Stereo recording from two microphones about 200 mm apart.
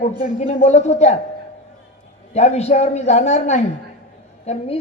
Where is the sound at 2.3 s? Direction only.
35° left (ahead or behind).